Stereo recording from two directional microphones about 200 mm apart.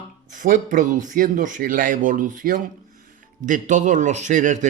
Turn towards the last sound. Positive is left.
turn(degrees=-40)  # may be behind; listen again after turning